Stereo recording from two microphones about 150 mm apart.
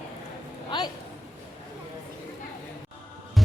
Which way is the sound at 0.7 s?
30° left (ahead or behind).